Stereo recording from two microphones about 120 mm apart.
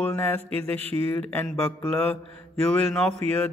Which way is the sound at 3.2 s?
60° right (ahead or behind).